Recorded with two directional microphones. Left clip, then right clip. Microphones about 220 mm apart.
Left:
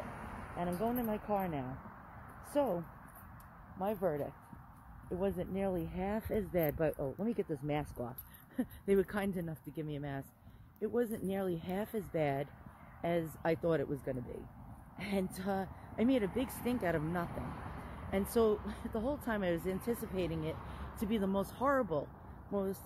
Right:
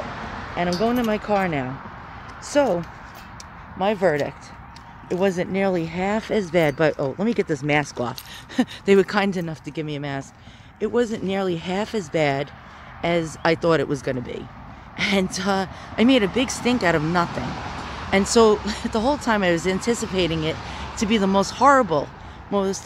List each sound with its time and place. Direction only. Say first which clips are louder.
0.6 s speech: right 15 dB; 10° right (ahead or behind)
3.8 s speech: right 16 dB; 15° right (ahead or behind)